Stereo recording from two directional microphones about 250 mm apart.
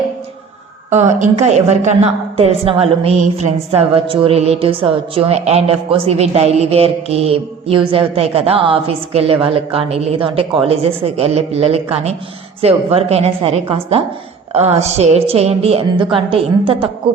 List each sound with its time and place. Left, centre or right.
1.2 s a woman's voice: right